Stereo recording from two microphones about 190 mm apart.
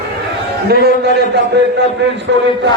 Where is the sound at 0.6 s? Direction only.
55° right (ahead or behind).